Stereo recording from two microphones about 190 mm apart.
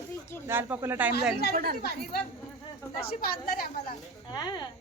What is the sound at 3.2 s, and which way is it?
Speech, 50° left (ahead or behind).